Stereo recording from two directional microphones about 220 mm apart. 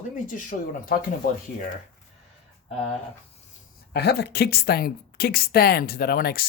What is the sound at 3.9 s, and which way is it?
A woman's voice, 50° left (ahead or behind).